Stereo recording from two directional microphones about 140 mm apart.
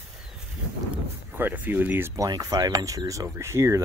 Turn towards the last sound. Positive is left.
turn(degrees=-20)  # may be behind; listen again after turning